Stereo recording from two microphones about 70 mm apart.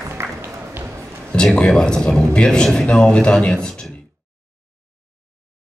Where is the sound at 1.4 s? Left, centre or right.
Centre.